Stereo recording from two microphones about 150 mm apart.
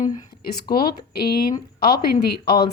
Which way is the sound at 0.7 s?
85° left.